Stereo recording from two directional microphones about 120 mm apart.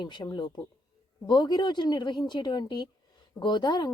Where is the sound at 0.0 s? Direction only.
40° left (ahead or behind).